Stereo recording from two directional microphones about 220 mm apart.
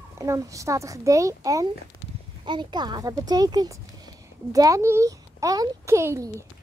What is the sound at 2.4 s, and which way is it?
Speech, 20° right (ahead or behind).